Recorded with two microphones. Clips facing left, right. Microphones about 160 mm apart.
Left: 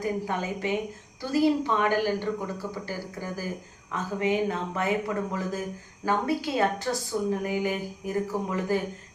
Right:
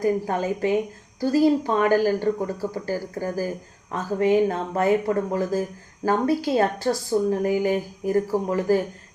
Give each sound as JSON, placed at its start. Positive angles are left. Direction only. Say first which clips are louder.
{"t": 0.0, "sound": "a woman's voice", "louder": "right 6 dB", "side_deg": -40}